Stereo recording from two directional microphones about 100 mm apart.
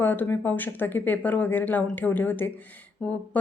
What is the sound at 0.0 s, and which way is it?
A woman's voice, 20° left (ahead or behind).